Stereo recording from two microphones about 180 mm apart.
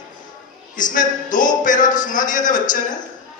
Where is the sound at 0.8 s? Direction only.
45° left (ahead or behind).